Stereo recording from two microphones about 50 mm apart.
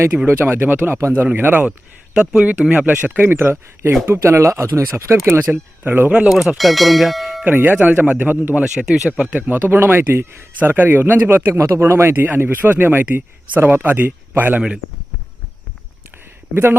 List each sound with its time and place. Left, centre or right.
0.3 s speech: right
2.1 s a man's voice: centre
2.5 s speech: right
3.2 s speech: right
4.0 s speech: right
5.4 s speech: right
6.2 s speech: centre
7.4 s speech: right
8.6 s speech: centre
9.5 s speech: right
11.5 s speech: right
12.1 s speech: right
13.1 s speech: right